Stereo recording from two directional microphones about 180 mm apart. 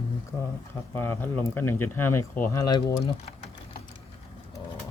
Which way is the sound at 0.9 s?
10° left (ahead or behind).